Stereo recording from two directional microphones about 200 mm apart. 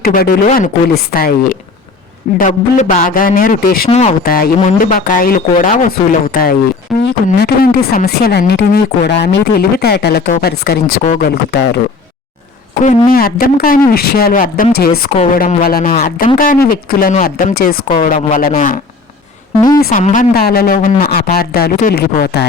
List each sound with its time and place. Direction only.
0.0 s speech: 50° left (ahead or behind)
3.8 s speech: 35° left (ahead or behind)
4.2 s speech: 45° left (ahead or behind)
11.0 s speech: 35° left (ahead or behind)
11.3 s speech: 50° left (ahead or behind)
13.1 s speech: 45° left (ahead or behind)
15.1 s speech: 35° left (ahead or behind)
19.8 s speech: 40° left (ahead or behind)